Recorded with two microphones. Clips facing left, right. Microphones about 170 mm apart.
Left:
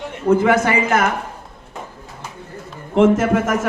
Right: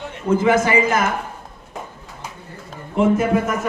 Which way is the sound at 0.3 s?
60° left (ahead or behind).